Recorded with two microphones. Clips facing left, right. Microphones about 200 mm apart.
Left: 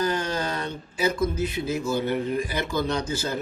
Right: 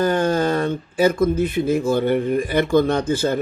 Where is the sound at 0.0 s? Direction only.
50° right (ahead or behind).